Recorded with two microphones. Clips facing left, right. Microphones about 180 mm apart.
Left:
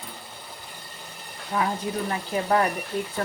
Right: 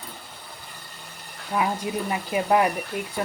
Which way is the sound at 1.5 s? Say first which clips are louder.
Right 1 dB; centre (ahead or behind).